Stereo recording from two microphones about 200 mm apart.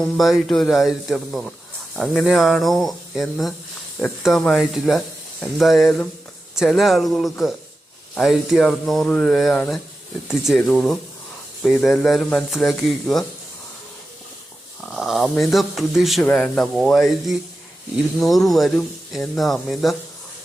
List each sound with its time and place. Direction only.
0.0 s speech: centre (ahead or behind)
14.8 s speech: centre (ahead or behind)